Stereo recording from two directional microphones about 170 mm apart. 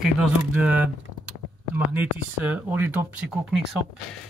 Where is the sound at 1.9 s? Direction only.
10° right (ahead or behind).